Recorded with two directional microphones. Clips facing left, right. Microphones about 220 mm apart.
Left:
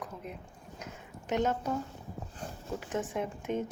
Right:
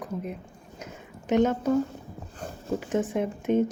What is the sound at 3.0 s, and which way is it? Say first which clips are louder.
Speech: right 7 dB; 65° right (ahead or behind).